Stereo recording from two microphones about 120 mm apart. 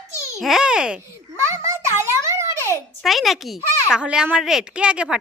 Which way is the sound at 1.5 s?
25° right (ahead or behind).